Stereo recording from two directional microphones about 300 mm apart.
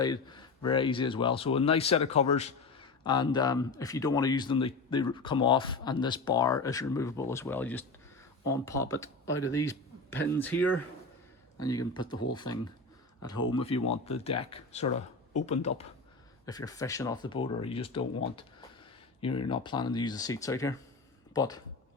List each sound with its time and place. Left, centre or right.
0.0 s speech: centre
11.9 s speech: centre
19.2 s speech: centre